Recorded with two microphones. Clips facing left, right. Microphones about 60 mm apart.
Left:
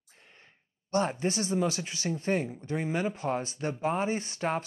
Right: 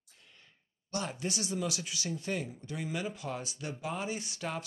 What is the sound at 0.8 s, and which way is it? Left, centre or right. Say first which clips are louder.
Speech: left 8 dB; left.